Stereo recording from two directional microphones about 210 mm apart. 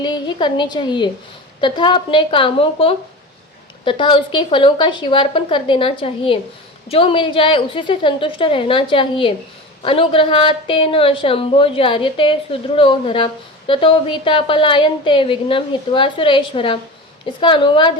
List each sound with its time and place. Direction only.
0.0 s a woman's voice: 20° left (ahead or behind)